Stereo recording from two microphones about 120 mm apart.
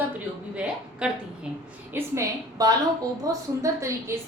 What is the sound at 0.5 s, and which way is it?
Speech, 10° right (ahead or behind).